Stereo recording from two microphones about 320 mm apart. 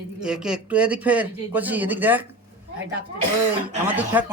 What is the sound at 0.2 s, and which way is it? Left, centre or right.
Speech, centre.